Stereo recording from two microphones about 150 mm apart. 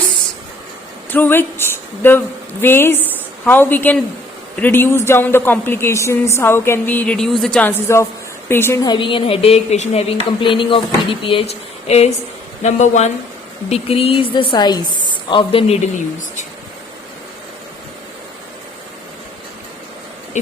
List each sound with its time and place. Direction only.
1.1 s a woman's voice: 15° left (ahead or behind)
8.8 s a woman's voice: 30° left (ahead or behind); by 16.5 s 55° left (ahead or behind)